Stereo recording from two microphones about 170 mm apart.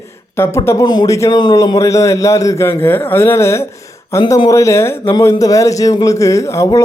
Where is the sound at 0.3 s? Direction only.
15° left (ahead or behind).